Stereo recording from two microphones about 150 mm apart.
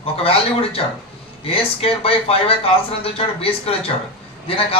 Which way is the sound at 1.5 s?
40° left (ahead or behind).